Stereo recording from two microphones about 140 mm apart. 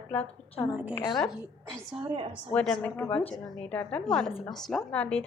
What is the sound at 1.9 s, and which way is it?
Speech, 40° right (ahead or behind).